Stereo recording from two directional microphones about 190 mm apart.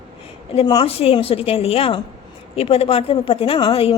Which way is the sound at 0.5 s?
20° left (ahead or behind).